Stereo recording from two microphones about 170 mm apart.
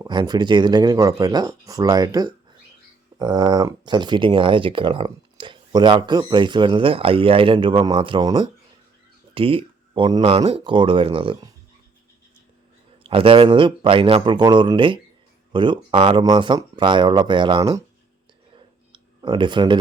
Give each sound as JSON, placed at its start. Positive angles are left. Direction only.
{"t": 0.0, "sound": "speech", "side_deg": -25}
{"t": 13.0, "sound": "speech", "side_deg": -30}
{"t": 18.5, "sound": "clicking", "side_deg": -30}